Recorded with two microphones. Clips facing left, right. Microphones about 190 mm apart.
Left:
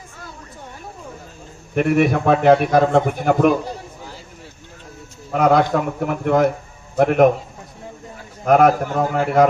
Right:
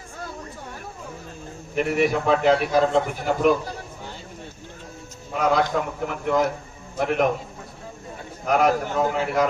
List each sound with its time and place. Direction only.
1.7 s a man's voice: 60° left (ahead or behind)
5.3 s a man's voice: 55° left (ahead or behind)
8.4 s a man's voice: 55° left (ahead or behind)